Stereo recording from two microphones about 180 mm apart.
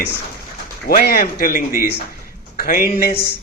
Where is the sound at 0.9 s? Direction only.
55° left (ahead or behind).